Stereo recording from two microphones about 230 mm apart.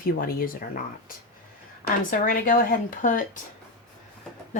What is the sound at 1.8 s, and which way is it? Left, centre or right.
Speech, left.